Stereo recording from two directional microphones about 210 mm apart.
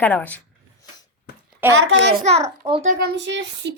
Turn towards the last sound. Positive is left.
turn(degrees=-60)  # may be behind; listen again after turning